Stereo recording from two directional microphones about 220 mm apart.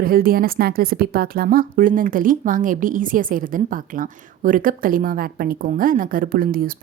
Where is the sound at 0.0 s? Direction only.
40° right (ahead or behind).